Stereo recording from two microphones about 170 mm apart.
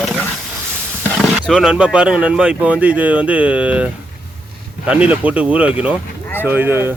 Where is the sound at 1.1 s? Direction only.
Centre (ahead or behind).